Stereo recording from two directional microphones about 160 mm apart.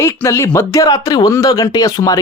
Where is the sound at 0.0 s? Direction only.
15° left (ahead or behind).